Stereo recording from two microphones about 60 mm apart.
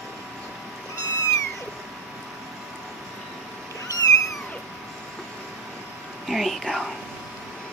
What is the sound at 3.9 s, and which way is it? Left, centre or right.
Cat, left.